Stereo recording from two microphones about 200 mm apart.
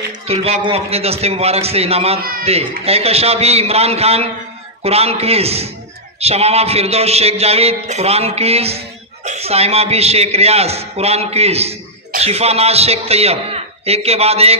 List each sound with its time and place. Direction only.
0.3 s a man's voice: 30° right (ahead or behind)